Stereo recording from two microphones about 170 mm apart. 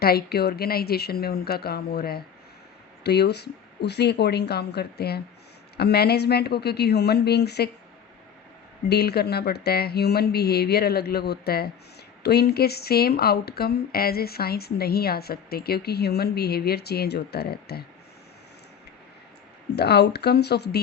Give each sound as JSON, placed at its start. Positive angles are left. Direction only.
{"t": 0.0, "sound": "speech", "side_deg": 65}
{"t": 8.9, "sound": "speech", "side_deg": 70}
{"t": 19.7, "sound": "speech", "side_deg": 75}